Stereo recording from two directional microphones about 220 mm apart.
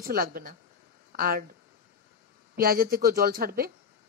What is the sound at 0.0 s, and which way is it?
Speech, 40° right (ahead or behind).